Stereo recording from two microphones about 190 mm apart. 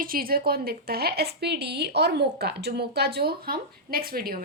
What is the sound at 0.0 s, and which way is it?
A woman's voice, 50° right (ahead or behind).